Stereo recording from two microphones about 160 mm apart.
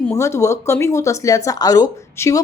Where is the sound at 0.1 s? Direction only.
20° left (ahead or behind).